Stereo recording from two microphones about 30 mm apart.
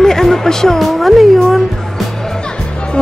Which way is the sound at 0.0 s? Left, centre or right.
Centre.